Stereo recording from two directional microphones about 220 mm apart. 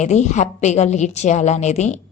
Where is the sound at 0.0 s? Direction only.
30° left (ahead or behind).